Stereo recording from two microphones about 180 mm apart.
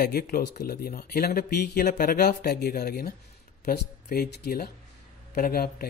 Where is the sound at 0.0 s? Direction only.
55° left (ahead or behind).